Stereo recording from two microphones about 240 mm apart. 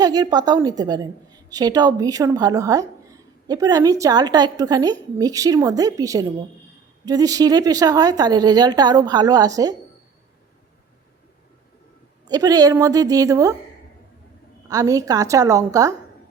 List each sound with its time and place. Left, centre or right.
0.0 s a woman's voice: centre
12.3 s a woman's voice: centre
14.7 s a woman's voice: centre